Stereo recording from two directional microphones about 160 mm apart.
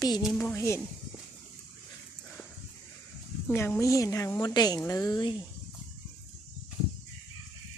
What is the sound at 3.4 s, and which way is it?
Speech, 15° left (ahead or behind).